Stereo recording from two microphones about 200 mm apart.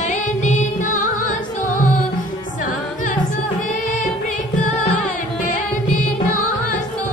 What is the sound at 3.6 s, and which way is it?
Music, 40° left (ahead or behind).